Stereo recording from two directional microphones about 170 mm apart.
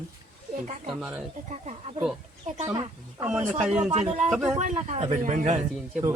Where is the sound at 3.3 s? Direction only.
5° right (ahead or behind).